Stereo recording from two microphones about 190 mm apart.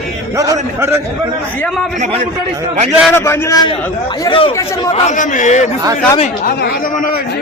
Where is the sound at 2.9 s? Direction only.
Centre (ahead or behind).